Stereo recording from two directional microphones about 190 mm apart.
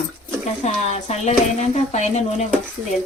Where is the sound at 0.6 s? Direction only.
35° left (ahead or behind).